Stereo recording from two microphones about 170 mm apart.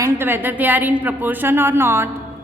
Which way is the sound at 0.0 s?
10° right (ahead or behind).